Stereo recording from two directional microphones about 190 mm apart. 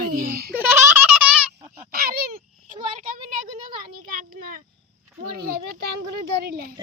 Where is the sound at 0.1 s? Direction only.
50° right (ahead or behind).